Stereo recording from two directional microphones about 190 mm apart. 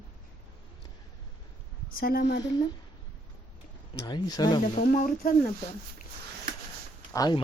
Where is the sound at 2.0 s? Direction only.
50° left (ahead or behind).